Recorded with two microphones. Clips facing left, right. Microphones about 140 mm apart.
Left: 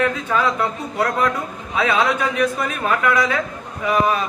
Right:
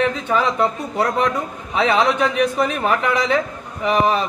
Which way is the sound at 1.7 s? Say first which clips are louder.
Right 2 dB; 25° right (ahead or behind).